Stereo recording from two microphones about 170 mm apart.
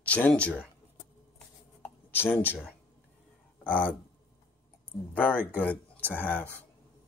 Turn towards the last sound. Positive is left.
turn(degrees=10)  # may be behind; listen again after turning